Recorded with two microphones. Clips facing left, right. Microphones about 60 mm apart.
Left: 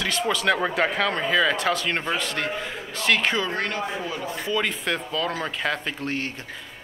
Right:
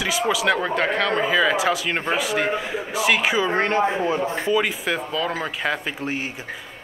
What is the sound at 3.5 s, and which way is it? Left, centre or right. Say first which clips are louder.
Speech: right 7 dB; right.